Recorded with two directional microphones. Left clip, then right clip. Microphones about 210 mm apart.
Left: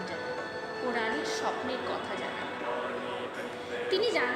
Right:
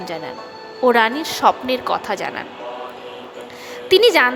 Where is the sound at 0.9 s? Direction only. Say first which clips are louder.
Right 14 dB; 55° right (ahead or behind).